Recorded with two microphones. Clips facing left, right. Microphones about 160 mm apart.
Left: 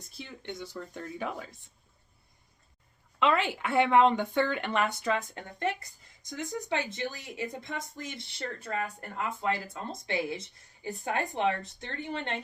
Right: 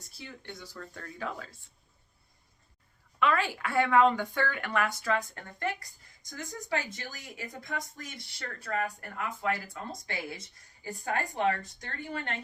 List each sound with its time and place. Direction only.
0.2 s speech: 20° left (ahead or behind)
3.2 s speech: 20° left (ahead or behind)